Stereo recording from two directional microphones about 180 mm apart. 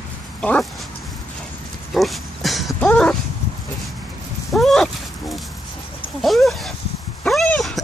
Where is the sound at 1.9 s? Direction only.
Centre (ahead or behind).